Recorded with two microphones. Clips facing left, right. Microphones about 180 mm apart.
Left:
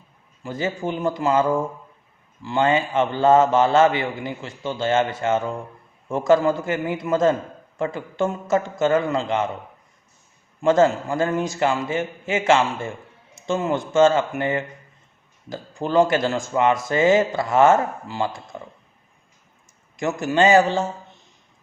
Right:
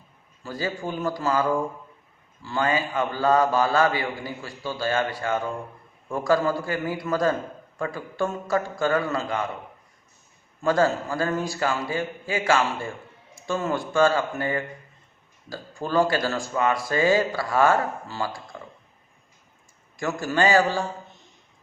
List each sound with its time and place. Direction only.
0.4 s speech: 20° left (ahead or behind)
10.6 s speech: 20° left (ahead or behind)
20.0 s speech: 20° left (ahead or behind)